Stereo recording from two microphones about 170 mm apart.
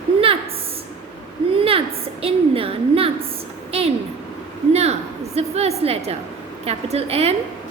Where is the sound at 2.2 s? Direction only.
35° right (ahead or behind).